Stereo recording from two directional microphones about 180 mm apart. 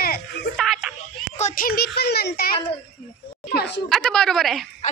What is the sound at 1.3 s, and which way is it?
A child's voice, 45° left (ahead or behind).